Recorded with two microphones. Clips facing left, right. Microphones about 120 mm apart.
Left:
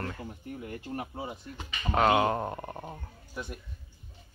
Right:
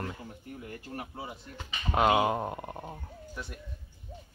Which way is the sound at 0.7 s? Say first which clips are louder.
Left 4 dB; 25° left (ahead or behind).